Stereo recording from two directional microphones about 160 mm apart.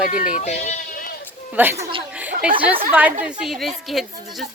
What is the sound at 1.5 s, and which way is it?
Speech, 10° right (ahead or behind).